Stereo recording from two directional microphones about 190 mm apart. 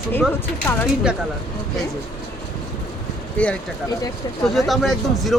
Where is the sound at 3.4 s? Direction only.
5° left (ahead or behind).